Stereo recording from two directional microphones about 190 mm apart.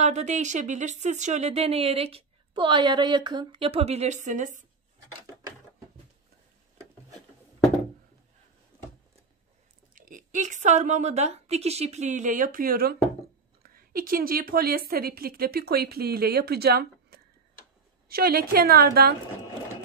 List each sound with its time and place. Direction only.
0.0 s speech: 35° right (ahead or behind)
8.7 s a sound: 15° right (ahead or behind)
9.9 s a woman's voice: 45° right (ahead or behind)